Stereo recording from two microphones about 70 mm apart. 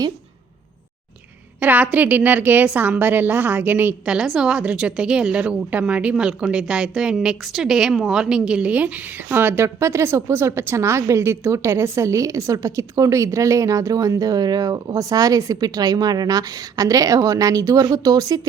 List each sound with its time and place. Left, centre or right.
1.5 s a woman's voice: right
4.0 s a woman's voice: centre; by 9.6 s right
9.6 s a woman's voice: right